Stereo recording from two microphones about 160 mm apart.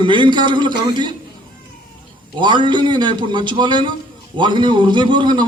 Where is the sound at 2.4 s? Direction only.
30° right (ahead or behind).